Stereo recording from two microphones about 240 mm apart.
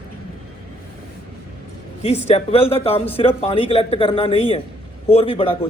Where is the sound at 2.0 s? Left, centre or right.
Left.